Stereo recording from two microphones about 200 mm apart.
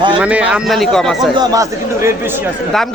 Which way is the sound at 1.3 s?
15° right (ahead or behind).